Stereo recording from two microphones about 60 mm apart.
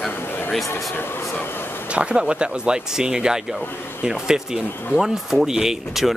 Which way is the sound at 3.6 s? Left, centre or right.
Left.